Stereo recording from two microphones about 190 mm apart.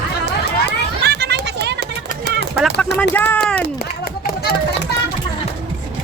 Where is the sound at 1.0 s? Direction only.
60° right (ahead or behind).